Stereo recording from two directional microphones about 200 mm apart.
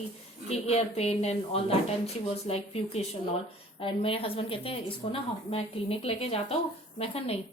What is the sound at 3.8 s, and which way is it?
A woman's voice, 25° left (ahead or behind).